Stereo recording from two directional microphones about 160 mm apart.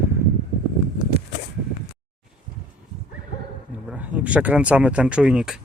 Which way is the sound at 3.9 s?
10° right (ahead or behind).